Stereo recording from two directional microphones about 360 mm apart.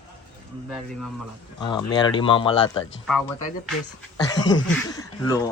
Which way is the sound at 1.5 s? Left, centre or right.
Centre.